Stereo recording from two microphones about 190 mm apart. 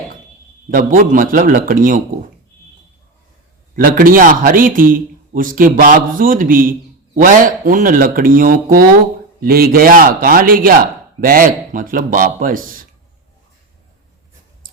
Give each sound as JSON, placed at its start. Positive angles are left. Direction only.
{"t": 0.7, "sound": "a man's voice", "side_deg": -45}
{"t": 3.8, "sound": "a man's voice", "side_deg": -45}